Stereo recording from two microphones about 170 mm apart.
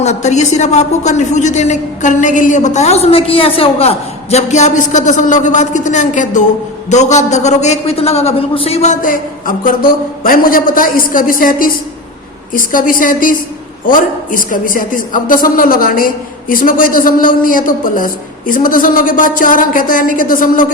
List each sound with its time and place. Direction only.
0.0 s a woman's voice: 40° left (ahead or behind)